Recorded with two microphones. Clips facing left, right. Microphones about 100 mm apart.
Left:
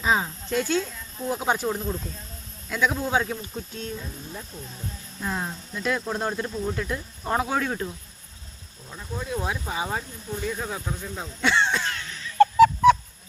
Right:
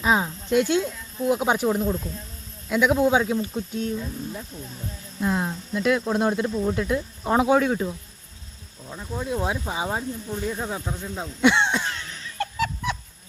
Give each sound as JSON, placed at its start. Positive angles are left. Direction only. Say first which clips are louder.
{"t": 0.0, "sound": "speech", "louder": "right 2 dB", "side_deg": -10}
{"t": 8.9, "sound": "speech", "louder": "right 3 dB", "side_deg": -15}
{"t": 12.4, "sound": "a sound", "louder": "left 12 dB", "side_deg": 45}